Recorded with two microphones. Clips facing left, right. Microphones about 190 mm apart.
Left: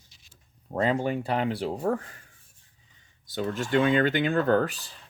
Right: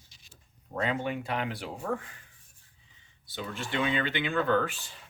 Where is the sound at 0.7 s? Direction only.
35° left (ahead or behind).